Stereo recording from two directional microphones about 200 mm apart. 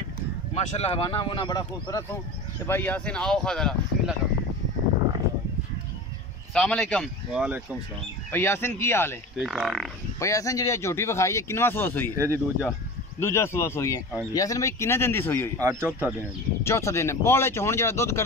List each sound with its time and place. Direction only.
0.6 s speech: 30° left (ahead or behind); by 4.1 s 5° left (ahead or behind)
6.5 s speech: 5° left (ahead or behind)
9.4 s speech: centre (ahead or behind)
10.1 s speech: 15° left (ahead or behind)
12.2 s speech: 10° right (ahead or behind)
13.2 s speech: 15° left (ahead or behind)
15.6 s speech: 15° right (ahead or behind)
16.6 s speech: 15° left (ahead or behind)